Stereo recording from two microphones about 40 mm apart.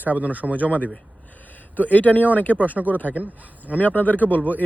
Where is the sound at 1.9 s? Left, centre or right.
Left.